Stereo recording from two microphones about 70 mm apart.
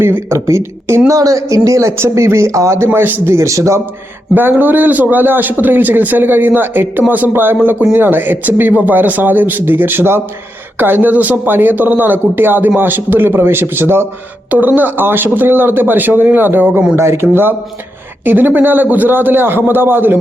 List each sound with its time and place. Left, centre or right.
0.0 s speech: right
0.3 s speech: right
1.1 s speech: right
4.4 s a man's voice: right
16.9 s a man's voice: right